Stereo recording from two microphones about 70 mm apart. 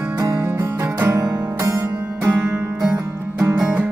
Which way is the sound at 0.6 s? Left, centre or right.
Right.